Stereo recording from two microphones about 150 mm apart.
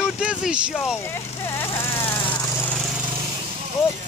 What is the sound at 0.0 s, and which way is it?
Vehicle, 5° right (ahead or behind).